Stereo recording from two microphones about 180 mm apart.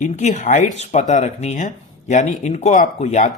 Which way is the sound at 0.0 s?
40° left (ahead or behind).